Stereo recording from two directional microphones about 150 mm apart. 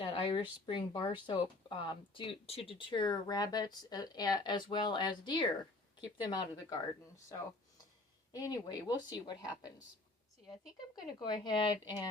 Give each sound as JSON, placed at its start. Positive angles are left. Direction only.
{"t": 0.0, "sound": "a woman's voice", "side_deg": 35}
{"t": 8.3, "sound": "a woman's voice", "side_deg": 25}
{"t": 10.9, "sound": "a woman's voice", "side_deg": 30}